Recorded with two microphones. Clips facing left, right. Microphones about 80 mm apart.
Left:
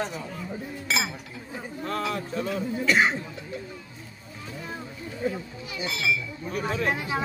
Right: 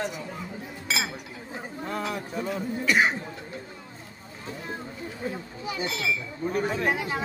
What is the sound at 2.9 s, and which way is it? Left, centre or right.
Speech, centre.